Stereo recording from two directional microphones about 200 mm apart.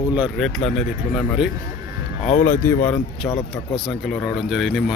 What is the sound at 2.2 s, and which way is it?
Speech, 45° left (ahead or behind).